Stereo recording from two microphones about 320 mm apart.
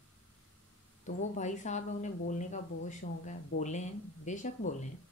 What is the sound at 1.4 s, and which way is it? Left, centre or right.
Speech, left.